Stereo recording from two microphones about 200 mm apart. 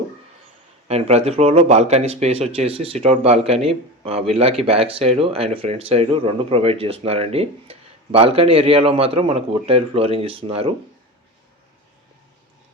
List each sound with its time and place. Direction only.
0.9 s speech: 30° right (ahead or behind)